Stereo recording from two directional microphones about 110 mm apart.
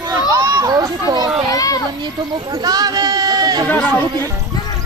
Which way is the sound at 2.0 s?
40° right (ahead or behind).